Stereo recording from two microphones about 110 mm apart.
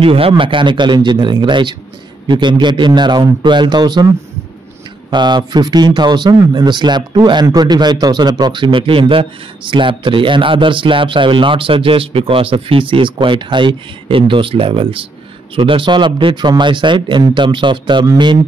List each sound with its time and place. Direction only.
0.0 s speech: 55° right (ahead or behind); by 4.1 s 40° right (ahead or behind)
5.1 s speech: 40° right (ahead or behind)